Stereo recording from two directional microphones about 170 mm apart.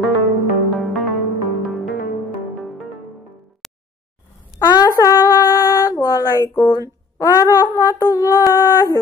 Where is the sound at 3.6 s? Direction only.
Centre (ahead or behind).